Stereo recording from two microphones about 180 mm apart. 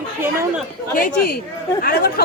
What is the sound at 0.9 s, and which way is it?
Speech, 55° left (ahead or behind).